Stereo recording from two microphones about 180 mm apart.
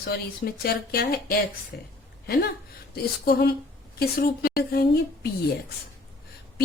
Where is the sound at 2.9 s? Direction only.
60° left (ahead or behind).